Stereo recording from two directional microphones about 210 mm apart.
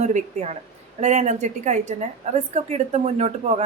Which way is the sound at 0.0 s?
35° right (ahead or behind).